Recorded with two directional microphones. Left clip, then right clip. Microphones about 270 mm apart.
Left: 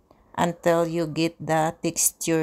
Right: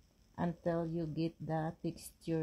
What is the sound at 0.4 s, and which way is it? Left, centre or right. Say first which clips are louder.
Speech: left 16 dB; left.